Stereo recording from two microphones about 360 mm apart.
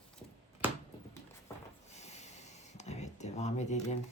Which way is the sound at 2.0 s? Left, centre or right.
Centre.